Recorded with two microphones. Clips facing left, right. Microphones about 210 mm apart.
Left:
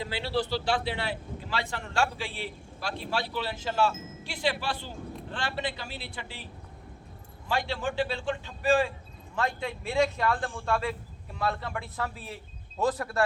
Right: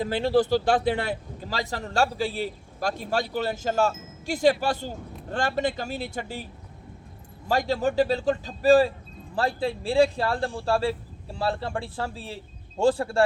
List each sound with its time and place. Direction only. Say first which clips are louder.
0.0 s a man's voice: right 8 dB; 45° right (ahead or behind); by 13.2 s 30° right (ahead or behind)